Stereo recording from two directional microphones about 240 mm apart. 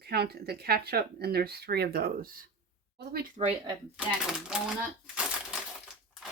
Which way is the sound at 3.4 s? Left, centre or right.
Right.